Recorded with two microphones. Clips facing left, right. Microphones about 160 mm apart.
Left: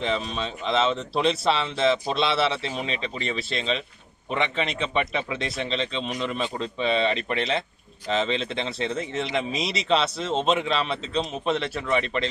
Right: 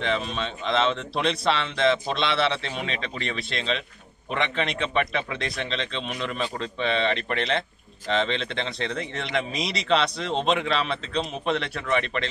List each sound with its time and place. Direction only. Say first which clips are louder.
0.0 s speech: even; centre (ahead or behind)
2.7 s speech: left 1 dB; 35° left (ahead or behind)
3.3 s speech: left 1 dB; 5° left (ahead or behind)